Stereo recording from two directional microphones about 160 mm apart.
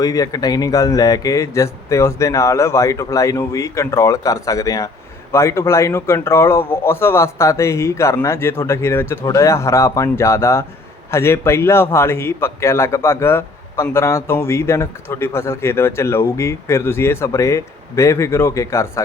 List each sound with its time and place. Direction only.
0.0 s a man's voice: 20° left (ahead or behind)